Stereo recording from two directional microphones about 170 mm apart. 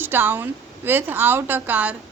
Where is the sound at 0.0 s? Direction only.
10° right (ahead or behind).